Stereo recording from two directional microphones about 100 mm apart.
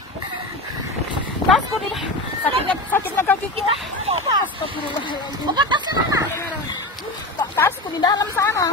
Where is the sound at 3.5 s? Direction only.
90° right.